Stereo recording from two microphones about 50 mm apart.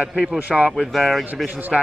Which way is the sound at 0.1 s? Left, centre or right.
Centre.